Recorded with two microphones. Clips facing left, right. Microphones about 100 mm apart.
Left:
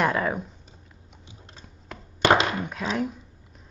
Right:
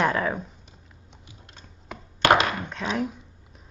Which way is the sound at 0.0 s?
Centre (ahead or behind).